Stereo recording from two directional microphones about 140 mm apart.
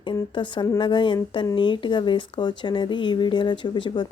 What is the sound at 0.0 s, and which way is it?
Speech, 35° left (ahead or behind).